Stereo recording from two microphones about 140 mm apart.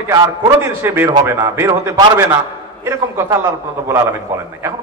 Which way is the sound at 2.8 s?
20° right (ahead or behind).